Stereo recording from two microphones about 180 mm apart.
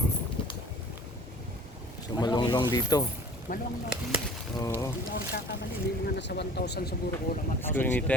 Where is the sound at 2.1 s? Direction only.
25° left (ahead or behind).